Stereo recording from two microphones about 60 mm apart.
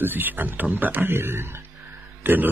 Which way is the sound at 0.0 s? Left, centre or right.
Right.